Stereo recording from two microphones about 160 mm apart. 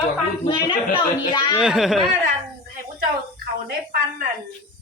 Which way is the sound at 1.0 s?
30° left (ahead or behind).